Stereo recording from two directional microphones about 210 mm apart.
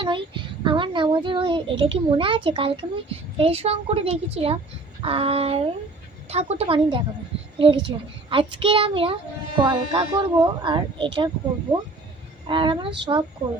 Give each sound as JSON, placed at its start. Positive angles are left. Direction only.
{"t": 0.0, "sound": "a child's voice", "side_deg": -25}
{"t": 12.5, "sound": "speech", "side_deg": -25}